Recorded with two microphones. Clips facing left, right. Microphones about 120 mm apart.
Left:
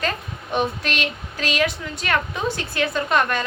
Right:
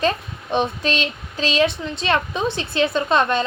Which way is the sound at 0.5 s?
20° right (ahead or behind).